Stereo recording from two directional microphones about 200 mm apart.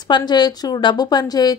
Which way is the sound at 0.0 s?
20° left (ahead or behind).